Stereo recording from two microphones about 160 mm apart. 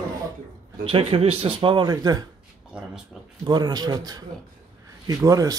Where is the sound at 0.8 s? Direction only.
35° right (ahead or behind).